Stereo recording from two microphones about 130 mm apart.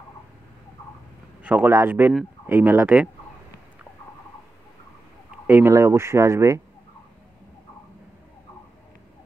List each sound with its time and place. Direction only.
1.4 s speech: 15° right (ahead or behind)
5.5 s speech: 20° right (ahead or behind)